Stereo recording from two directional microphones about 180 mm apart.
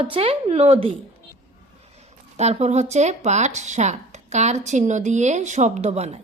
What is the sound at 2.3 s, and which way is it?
Speech, 40° right (ahead or behind).